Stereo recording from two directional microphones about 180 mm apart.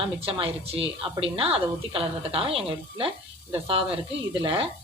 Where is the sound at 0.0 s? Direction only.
30° right (ahead or behind).